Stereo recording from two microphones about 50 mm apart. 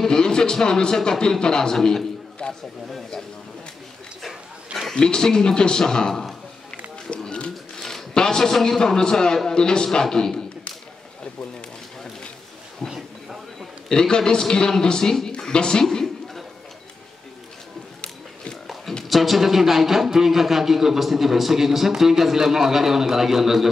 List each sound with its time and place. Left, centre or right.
0.0 s speech: centre
2.4 s a sound: centre
2.9 s speech: centre
4.9 s speech: centre
7.1 s a sound: left
7.8 s a man's voice: centre
12.9 s a sound: centre
13.8 s speech: centre
19.0 s a man's voice: centre